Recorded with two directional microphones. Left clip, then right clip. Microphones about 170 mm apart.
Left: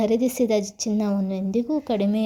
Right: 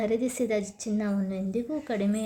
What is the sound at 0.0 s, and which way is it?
A woman's voice, 25° left (ahead or behind).